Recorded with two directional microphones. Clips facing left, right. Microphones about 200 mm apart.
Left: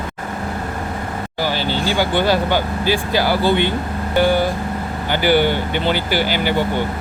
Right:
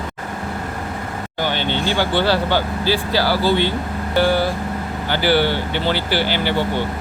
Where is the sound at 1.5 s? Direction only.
40° left (ahead or behind).